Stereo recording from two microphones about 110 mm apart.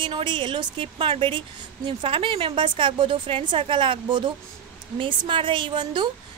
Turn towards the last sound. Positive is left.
turn(degrees=-45)  # may be behind; listen again after turning